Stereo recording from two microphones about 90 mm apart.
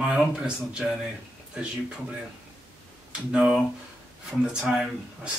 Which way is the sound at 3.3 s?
10° right (ahead or behind).